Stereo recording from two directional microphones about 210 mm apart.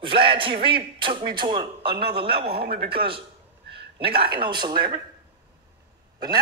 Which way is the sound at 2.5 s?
45° right (ahead or behind).